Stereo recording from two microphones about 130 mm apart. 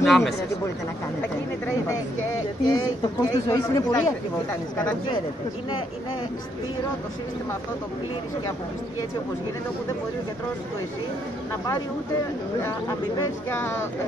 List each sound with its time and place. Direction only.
0.0 s speech: centre (ahead or behind)
2.6 s speech: 30° left (ahead or behind)
12.6 s speech: 25° left (ahead or behind)